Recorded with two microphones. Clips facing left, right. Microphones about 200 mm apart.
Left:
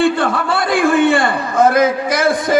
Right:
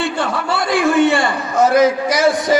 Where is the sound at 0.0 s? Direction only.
55° left (ahead or behind).